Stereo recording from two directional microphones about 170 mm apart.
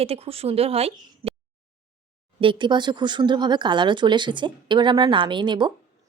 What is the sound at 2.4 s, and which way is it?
A woman's voice, 30° right (ahead or behind).